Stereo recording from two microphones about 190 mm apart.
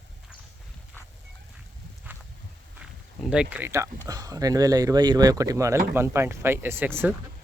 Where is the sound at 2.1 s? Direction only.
10° right (ahead or behind).